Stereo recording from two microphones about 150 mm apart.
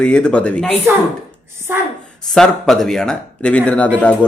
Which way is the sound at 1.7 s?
15° right (ahead or behind).